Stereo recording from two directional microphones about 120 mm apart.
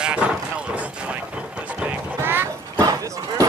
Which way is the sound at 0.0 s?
10° right (ahead or behind).